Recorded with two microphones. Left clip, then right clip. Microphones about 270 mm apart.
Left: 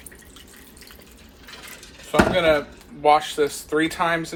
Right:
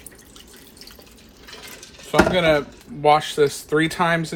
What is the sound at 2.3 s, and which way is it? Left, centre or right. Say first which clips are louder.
Speech: right 1 dB; right.